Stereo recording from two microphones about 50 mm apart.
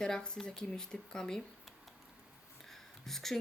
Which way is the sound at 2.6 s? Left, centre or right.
Centre.